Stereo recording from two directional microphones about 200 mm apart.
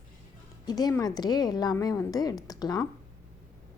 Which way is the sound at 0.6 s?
20° left (ahead or behind).